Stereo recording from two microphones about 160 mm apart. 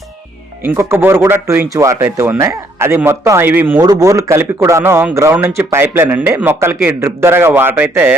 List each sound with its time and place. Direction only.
0.6 s a man's voice: 15° right (ahead or behind)